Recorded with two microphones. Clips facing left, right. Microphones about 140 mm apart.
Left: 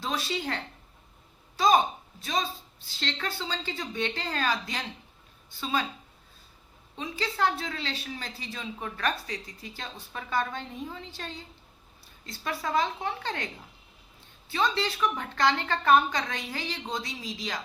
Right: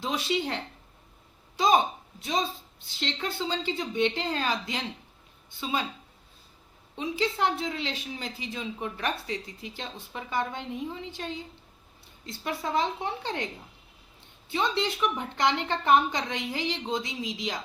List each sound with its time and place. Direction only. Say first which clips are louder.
0.0 s speech: right 3 dB; 20° right (ahead or behind)
6.9 s speech: right 4 dB; 20° right (ahead or behind)
14.5 s speech: even; 20° right (ahead or behind)